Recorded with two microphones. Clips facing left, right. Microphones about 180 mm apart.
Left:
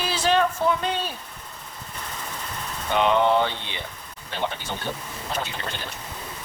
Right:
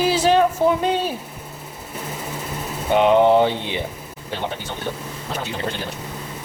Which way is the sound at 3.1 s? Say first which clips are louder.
Right 6 dB; 45° right (ahead or behind).